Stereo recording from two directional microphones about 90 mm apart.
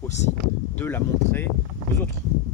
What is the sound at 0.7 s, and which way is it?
Speech, 25° left (ahead or behind).